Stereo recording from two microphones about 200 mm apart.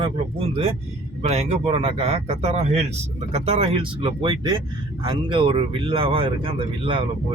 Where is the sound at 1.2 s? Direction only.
30° right (ahead or behind).